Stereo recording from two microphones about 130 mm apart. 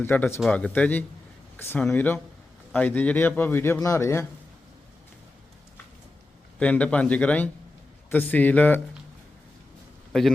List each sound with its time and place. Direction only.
0.0 s a man's voice: 15° left (ahead or behind)
6.6 s a man's voice: 10° left (ahead or behind)
10.1 s speech: centre (ahead or behind)